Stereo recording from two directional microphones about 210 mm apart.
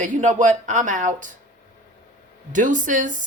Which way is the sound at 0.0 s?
35° right (ahead or behind).